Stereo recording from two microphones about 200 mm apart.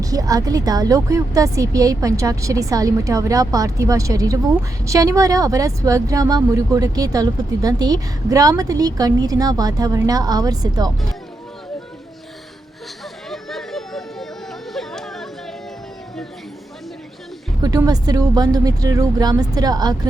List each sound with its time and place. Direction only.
0.0 s speech: 15° right (ahead or behind)
13.3 s a sound: centre (ahead or behind)
17.6 s speech: 20° right (ahead or behind)